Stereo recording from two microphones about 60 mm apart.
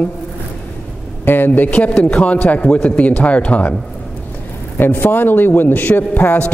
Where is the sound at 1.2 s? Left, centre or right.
Left.